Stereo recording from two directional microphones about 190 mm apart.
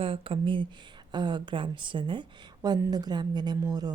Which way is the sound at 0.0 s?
25° right (ahead or behind).